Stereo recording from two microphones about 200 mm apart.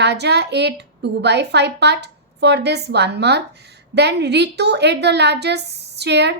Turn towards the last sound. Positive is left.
turn(degrees=-55)  # may be behind; listen again after turning